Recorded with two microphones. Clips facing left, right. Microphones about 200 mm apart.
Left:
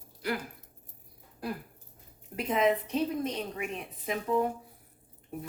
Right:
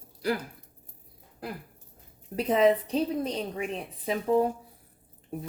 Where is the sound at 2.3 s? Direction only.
35° right (ahead or behind).